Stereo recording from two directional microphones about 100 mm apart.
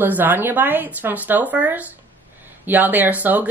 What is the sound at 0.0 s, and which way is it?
A woman's voice, 20° right (ahead or behind).